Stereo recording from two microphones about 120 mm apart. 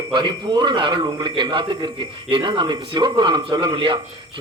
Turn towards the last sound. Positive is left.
turn(degrees=-40)  # may be behind; listen again after turning